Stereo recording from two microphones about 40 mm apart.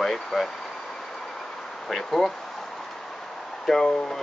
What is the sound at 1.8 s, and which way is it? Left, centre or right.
Speech, centre.